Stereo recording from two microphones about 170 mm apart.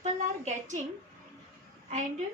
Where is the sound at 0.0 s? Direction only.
45° right (ahead or behind).